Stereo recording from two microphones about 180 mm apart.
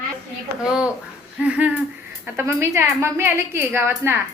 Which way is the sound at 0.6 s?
5° right (ahead or behind).